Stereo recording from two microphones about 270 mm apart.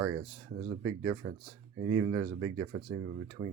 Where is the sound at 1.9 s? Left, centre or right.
Right.